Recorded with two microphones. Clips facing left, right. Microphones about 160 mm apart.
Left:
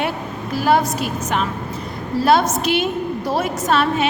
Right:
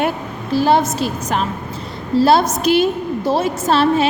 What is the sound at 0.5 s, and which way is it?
A woman's voice, 30° right (ahead or behind).